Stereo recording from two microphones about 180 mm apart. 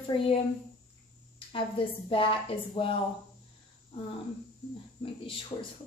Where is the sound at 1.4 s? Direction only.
30° left (ahead or behind).